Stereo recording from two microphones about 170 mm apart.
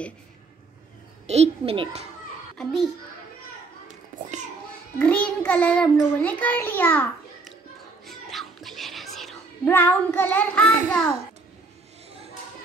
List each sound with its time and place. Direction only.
1.2 s a child's voice: 40° right (ahead or behind)
2.5 s a child's voice: centre (ahead or behind)
4.1 s children playing: 50° right (ahead or behind)
4.9 s a child's voice: 10° left (ahead or behind)
8.1 s music: centre (ahead or behind)
9.7 s a child's voice: 10° left (ahead or behind)